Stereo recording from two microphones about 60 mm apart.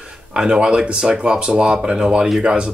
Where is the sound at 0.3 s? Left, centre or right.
Centre.